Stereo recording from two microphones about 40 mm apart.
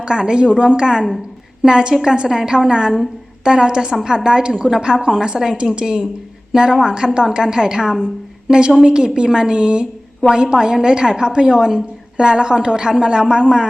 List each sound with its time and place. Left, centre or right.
0.0 s a woman's voice: right